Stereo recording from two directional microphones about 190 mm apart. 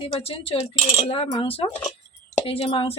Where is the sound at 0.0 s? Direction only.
30° left (ahead or behind).